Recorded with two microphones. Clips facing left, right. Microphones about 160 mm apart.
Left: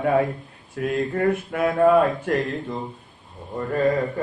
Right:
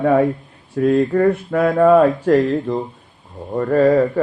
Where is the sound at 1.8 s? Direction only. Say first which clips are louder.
Right 5 dB; 40° right (ahead or behind).